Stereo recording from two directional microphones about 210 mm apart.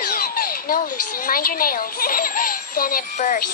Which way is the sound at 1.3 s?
45° left (ahead or behind).